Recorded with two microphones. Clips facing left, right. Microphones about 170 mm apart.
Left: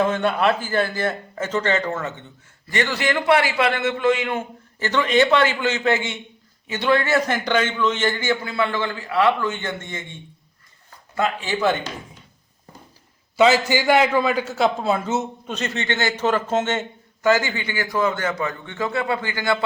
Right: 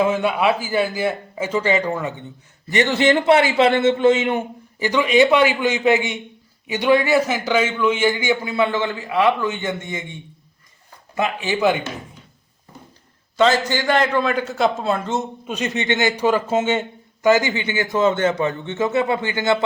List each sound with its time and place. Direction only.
0.0 s a man's voice: 10° right (ahead or behind)
7.3 s a man's voice: 5° right (ahead or behind)
13.3 s a man's voice: 10° left (ahead or behind)
15.4 s a man's voice: 15° right (ahead or behind)